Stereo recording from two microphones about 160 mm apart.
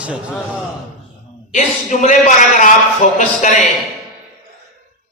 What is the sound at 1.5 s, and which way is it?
A man's voice, 50° left (ahead or behind).